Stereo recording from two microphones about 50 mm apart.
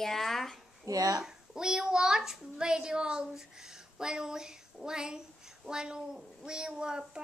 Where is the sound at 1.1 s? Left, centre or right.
Centre.